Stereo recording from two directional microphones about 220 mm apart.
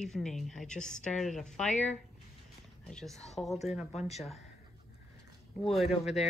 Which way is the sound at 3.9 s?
30° left (ahead or behind).